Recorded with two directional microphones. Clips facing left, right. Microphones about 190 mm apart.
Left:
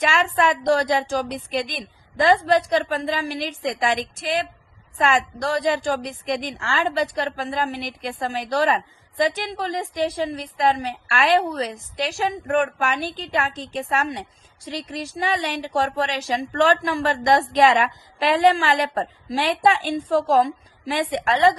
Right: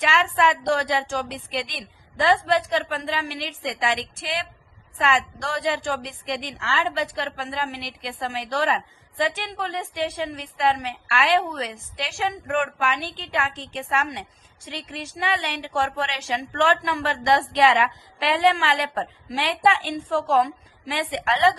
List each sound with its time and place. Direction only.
0.0 s a woman's voice: 45° left (ahead or behind)